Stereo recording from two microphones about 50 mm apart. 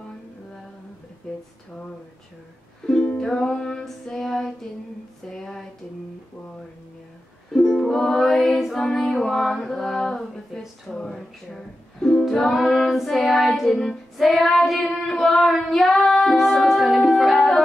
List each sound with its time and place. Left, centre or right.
2.9 s music: left
7.5 s music: centre
12.3 s child singing: centre
15.7 s music: centre